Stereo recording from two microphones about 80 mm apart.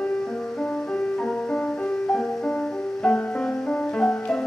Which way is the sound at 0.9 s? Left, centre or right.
Centre.